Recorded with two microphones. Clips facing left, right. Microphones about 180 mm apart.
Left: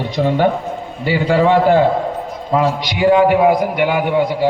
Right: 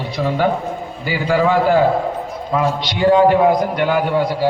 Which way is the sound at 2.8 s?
10° left (ahead or behind).